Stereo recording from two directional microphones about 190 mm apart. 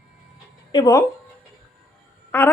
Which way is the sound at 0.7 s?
20° left (ahead or behind).